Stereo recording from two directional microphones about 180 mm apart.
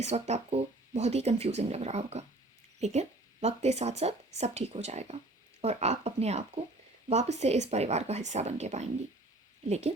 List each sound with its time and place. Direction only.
0.0 s speech: 35° right (ahead or behind)